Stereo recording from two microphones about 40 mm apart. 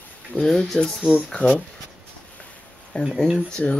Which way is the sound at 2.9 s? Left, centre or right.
Left.